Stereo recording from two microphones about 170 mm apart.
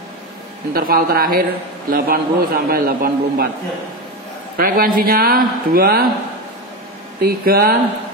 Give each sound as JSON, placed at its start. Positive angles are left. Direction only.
{"t": 0.7, "sound": "a man's voice", "side_deg": -60}
{"t": 4.6, "sound": "a man's voice", "side_deg": -60}
{"t": 7.2, "sound": "a man's voice", "side_deg": -65}